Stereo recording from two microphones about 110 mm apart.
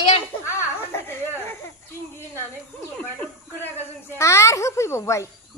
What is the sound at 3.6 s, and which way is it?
Speech, 20° left (ahead or behind).